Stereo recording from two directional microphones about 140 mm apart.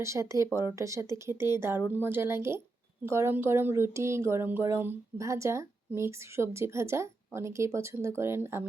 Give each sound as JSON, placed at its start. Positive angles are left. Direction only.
{"t": 0.0, "sound": "speech", "side_deg": -20}